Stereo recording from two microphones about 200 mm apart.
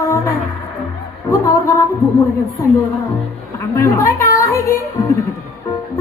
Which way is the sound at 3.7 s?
15° left (ahead or behind).